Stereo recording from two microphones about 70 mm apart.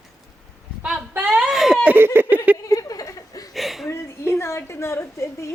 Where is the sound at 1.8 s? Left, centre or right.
Right.